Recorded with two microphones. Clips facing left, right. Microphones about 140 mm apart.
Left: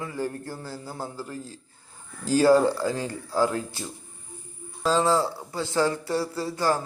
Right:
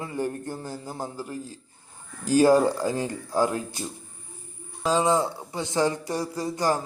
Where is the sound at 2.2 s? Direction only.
15° right (ahead or behind).